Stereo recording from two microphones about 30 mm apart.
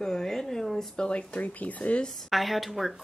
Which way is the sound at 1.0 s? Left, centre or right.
Left.